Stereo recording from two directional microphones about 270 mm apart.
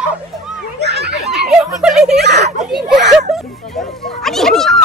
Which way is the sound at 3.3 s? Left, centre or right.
Centre.